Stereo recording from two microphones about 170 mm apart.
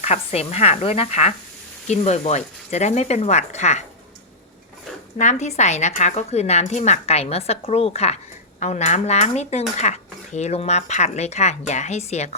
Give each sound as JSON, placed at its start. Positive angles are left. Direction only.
{"t": 0.0, "sound": "a woman's voice", "side_deg": 40}
{"t": 5.1, "sound": "a woman's voice", "side_deg": 45}